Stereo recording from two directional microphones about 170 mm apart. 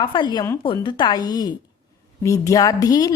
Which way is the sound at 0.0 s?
25° left (ahead or behind).